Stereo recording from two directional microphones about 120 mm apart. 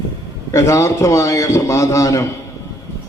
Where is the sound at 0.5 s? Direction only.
25° left (ahead or behind).